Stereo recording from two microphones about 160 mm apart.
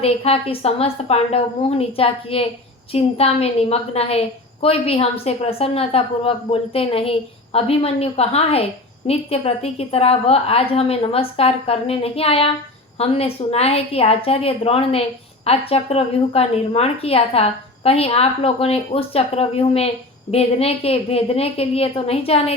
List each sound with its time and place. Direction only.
0.0 s a woman's voice: 40° left (ahead or behind)